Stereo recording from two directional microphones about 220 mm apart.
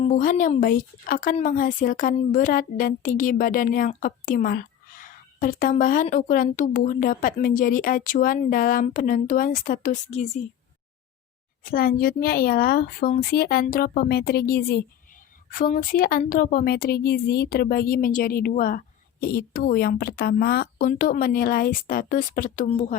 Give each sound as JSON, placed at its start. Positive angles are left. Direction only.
{"t": 0.0, "sound": "a woman's voice", "side_deg": 35}
{"t": 11.6, "sound": "a woman's voice", "side_deg": 40}